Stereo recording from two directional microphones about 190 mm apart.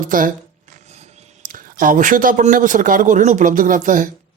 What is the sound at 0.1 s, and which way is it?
Speech, 45° right (ahead or behind).